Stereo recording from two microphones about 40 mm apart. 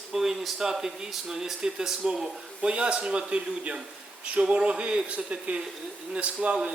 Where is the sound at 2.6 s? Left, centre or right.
Right.